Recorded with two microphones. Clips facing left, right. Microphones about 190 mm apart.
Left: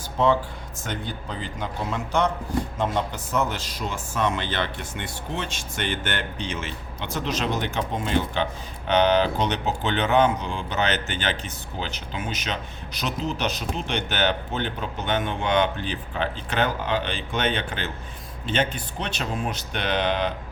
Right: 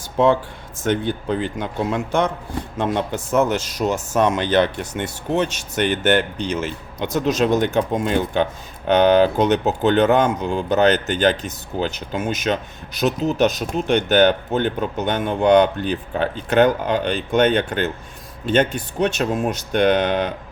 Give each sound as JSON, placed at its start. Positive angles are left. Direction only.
{"t": 0.9, "sound": "speech", "side_deg": -60}